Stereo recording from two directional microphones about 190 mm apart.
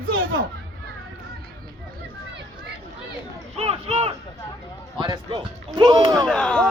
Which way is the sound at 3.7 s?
30° right (ahead or behind).